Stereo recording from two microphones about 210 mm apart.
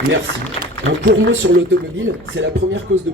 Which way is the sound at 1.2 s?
60° right (ahead or behind).